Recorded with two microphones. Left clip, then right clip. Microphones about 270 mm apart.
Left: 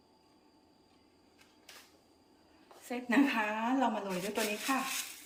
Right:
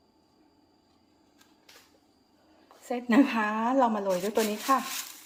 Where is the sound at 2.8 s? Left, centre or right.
Right.